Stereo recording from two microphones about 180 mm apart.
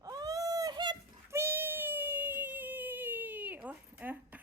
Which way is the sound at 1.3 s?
15° right (ahead or behind).